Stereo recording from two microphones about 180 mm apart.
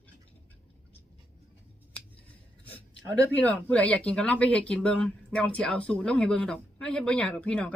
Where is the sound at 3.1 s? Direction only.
10° left (ahead or behind).